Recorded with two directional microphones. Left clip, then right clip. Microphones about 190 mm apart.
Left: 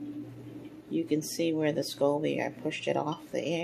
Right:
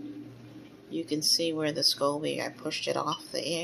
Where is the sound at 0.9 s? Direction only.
20° left (ahead or behind).